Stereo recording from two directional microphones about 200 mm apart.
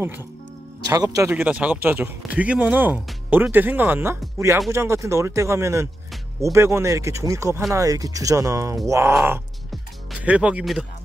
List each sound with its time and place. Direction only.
0.8 s speech: 20° right (ahead or behind)